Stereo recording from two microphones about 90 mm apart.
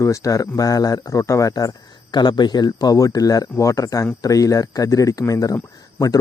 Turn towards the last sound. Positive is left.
turn(degrees=40)  # may be behind; listen again after turning